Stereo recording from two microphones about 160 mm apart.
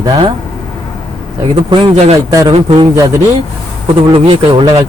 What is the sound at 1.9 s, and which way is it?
Speech, 40° right (ahead or behind).